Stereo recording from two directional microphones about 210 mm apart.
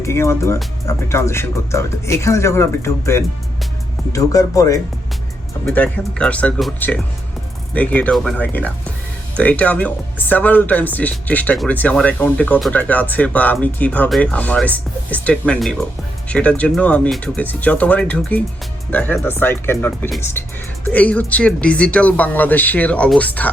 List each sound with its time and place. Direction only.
0.0 s speech: 15° left (ahead or behind)
5.6 s speech: 5° left (ahead or behind)